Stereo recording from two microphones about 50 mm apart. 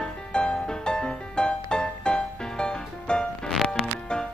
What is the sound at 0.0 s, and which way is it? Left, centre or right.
Music, centre.